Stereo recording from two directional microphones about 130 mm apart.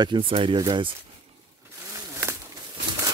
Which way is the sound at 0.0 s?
40° right (ahead or behind).